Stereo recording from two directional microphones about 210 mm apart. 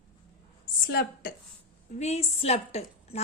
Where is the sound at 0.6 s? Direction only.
45° left (ahead or behind).